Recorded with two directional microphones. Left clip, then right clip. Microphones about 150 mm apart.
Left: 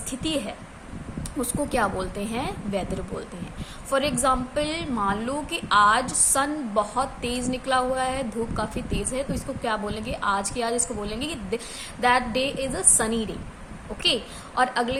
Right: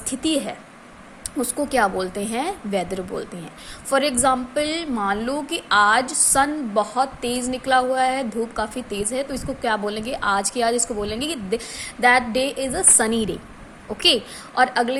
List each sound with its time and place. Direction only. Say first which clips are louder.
0.1 s a woman's voice: right 5 dB; 35° right (ahead or behind)